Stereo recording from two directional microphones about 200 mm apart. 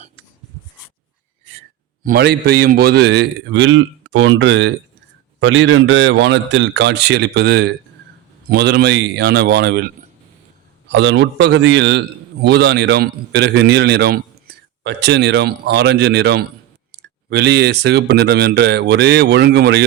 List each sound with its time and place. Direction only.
2.0 s a man's voice: 55° right (ahead or behind)